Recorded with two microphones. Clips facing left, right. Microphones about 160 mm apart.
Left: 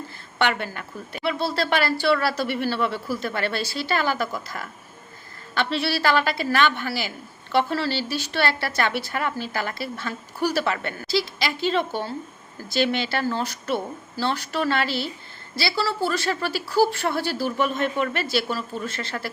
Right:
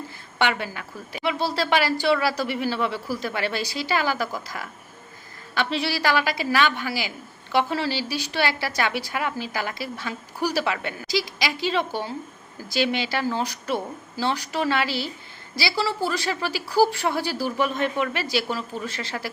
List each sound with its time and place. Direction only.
0.4 s a woman's voice: 5° right (ahead or behind)